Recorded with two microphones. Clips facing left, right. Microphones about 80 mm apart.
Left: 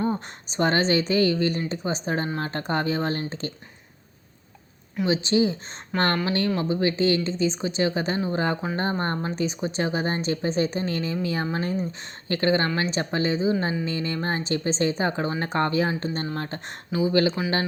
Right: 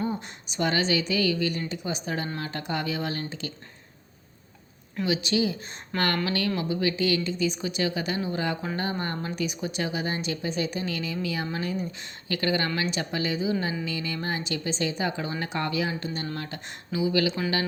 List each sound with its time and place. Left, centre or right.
0.0 s speech: left
5.0 s speech: left